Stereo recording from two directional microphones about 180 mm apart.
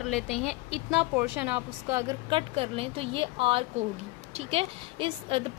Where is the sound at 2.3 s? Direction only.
35° right (ahead or behind).